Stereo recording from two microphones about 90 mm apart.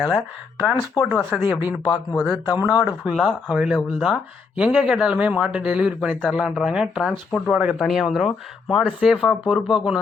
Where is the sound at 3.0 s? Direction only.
5° right (ahead or behind).